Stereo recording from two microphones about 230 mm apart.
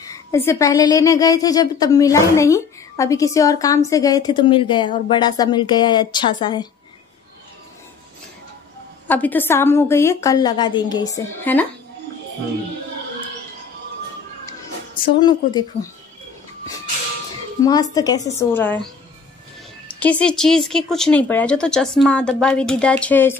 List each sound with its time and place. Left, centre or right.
0.0 s a woman's voice: centre
9.0 s a woman's voice: centre
15.0 s speech: centre
17.6 s a woman's voice: centre
19.9 s speech: centre